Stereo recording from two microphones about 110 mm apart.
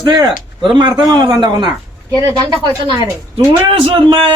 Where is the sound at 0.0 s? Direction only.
40° right (ahead or behind).